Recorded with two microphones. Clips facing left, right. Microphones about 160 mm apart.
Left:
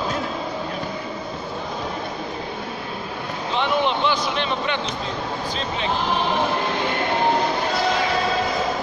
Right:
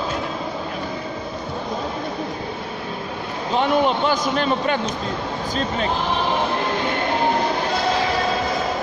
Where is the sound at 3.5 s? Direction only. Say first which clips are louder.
Right 3 dB; 45° right (ahead or behind).